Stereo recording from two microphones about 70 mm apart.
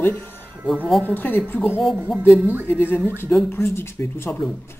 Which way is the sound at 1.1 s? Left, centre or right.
Left.